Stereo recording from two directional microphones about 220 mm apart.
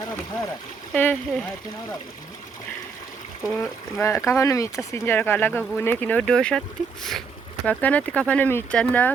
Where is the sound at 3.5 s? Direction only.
10° left (ahead or behind).